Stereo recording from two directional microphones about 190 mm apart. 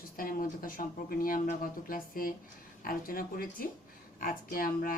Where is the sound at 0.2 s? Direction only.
45° left (ahead or behind).